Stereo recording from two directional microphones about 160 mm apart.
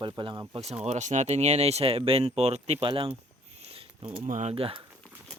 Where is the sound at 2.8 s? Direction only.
35° right (ahead or behind).